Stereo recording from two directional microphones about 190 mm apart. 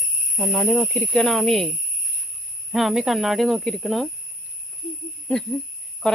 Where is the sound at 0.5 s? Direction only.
10° left (ahead or behind).